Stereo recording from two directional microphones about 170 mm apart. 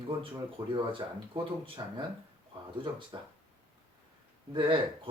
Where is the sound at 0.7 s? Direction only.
30° right (ahead or behind).